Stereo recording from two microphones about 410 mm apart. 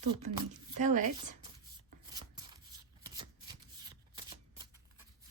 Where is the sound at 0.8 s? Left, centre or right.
Centre.